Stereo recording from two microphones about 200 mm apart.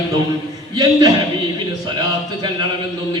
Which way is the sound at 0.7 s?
20° right (ahead or behind).